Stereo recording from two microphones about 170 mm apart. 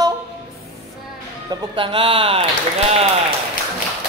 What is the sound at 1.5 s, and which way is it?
Speech, 30° right (ahead or behind).